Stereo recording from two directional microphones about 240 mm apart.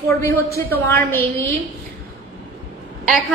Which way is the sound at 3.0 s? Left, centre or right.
Centre.